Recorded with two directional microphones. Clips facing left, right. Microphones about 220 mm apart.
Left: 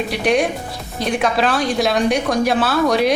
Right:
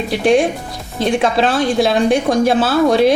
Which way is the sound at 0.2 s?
30° right (ahead or behind).